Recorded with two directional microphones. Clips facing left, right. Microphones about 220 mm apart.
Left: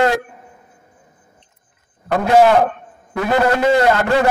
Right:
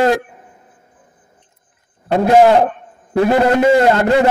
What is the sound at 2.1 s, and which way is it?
A man's voice, 25° right (ahead or behind).